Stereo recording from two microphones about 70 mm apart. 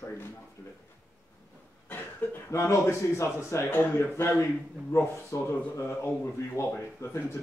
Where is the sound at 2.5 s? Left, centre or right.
Left.